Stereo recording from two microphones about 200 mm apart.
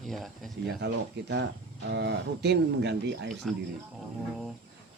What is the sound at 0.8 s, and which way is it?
Speech, 60° right (ahead or behind).